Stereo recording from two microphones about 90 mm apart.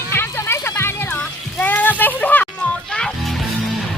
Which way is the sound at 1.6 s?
20° left (ahead or behind).